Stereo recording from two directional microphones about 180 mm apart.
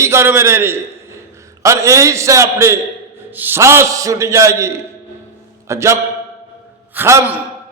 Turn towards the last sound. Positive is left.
turn(degrees=-10)  # may be behind; listen again after turning